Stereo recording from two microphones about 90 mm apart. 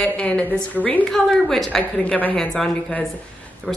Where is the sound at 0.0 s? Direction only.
10° left (ahead or behind).